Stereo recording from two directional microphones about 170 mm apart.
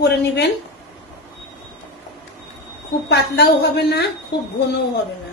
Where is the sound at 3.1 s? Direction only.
75° left (ahead or behind).